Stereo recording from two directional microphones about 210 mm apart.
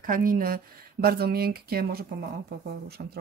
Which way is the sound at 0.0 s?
40° right (ahead or behind).